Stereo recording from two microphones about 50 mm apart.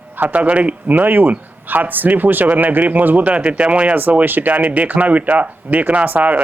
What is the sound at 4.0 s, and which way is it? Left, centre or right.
Speech, right.